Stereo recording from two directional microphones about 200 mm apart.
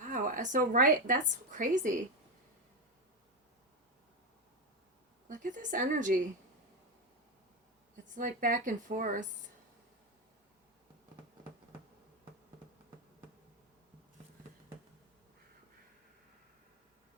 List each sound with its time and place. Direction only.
0.0 s a woman's voice: 40° right (ahead or behind)
5.3 s speech: 40° right (ahead or behind)
8.0 s speech: 40° right (ahead or behind)